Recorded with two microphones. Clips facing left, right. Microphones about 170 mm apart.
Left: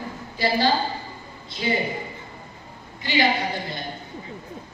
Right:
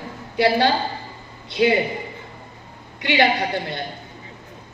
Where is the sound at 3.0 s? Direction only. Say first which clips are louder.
Right 3 dB; 70° right (ahead or behind).